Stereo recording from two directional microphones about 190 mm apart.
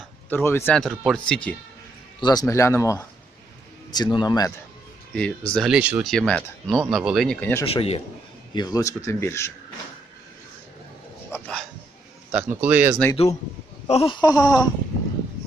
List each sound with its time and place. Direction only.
0.3 s speech: 10° left (ahead or behind)
2.2 s speech: 20° left (ahead or behind)
5.1 s speech: 5° left (ahead or behind)
7.6 s speech: 30° left (ahead or behind)
8.5 s speech: 20° left (ahead or behind)
11.3 s a sound: 5° left (ahead or behind)
12.3 s speech: 10° right (ahead or behind)
13.8 s speech: 30° left (ahead or behind)